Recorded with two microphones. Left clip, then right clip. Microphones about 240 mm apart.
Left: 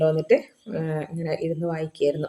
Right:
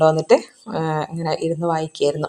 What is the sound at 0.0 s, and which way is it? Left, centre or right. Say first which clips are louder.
Speech: right 5 dB; right.